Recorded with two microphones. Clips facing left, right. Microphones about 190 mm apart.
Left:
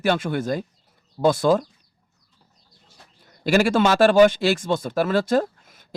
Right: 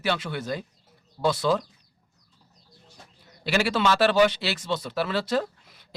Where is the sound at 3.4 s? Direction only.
45° left (ahead or behind).